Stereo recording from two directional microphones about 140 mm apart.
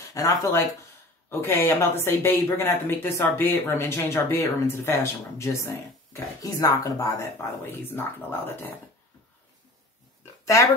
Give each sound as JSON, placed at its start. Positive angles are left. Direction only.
{"t": 0.0, "sound": "a woman's voice", "side_deg": 25}
{"t": 10.4, "sound": "speech", "side_deg": 20}